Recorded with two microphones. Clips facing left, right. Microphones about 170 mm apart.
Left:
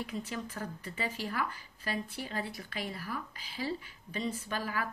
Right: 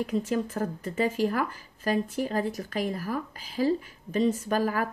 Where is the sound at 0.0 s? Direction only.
45° right (ahead or behind).